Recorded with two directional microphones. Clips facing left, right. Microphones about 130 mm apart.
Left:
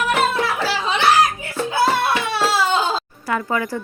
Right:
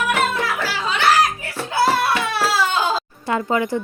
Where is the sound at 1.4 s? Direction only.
25° left (ahead or behind).